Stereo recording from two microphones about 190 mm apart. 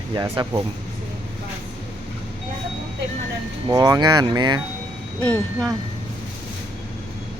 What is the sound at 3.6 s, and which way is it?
Speech, 20° right (ahead or behind).